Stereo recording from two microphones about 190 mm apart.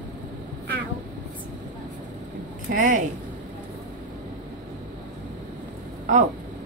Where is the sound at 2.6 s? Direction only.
45° right (ahead or behind).